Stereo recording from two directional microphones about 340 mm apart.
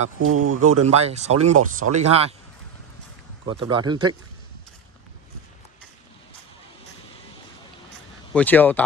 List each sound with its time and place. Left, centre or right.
0.2 s speech: right
0.8 s speech: centre
3.4 s speech: centre
8.3 s speech: centre